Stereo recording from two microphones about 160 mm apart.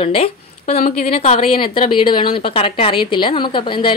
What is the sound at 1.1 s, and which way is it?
A woman's voice, 35° left (ahead or behind).